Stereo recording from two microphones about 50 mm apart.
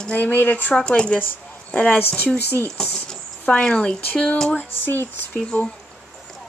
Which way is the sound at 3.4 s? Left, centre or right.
Centre.